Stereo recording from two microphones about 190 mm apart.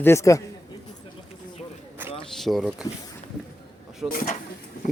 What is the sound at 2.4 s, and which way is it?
Speech, centre (ahead or behind).